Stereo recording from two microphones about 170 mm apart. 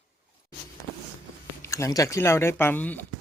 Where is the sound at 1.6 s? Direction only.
20° left (ahead or behind).